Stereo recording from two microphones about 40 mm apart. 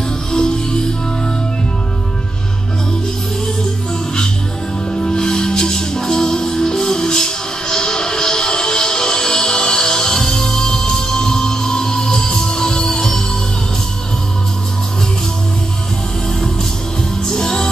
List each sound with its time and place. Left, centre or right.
0.3 s music: centre
4.9 s music: centre
17.3 s music: centre